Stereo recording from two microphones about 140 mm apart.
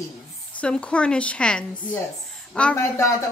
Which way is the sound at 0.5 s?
5° left (ahead or behind).